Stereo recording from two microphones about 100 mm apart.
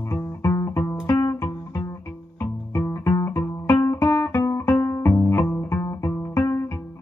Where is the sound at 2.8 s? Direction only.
30° left (ahead or behind).